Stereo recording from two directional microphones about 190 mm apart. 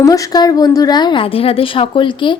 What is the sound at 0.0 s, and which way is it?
Speech, 20° left (ahead or behind).